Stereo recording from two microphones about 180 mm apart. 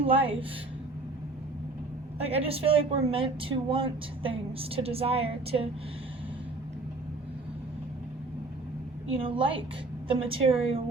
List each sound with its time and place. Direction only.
0.0 s a woman's voice: 30° right (ahead or behind)
2.2 s a woman's voice: 35° right (ahead or behind)
9.0 s a woman's voice: 30° right (ahead or behind)